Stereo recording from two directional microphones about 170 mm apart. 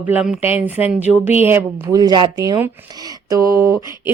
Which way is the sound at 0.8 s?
10° right (ahead or behind).